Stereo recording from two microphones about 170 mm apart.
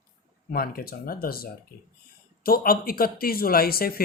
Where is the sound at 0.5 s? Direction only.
60° left (ahead or behind).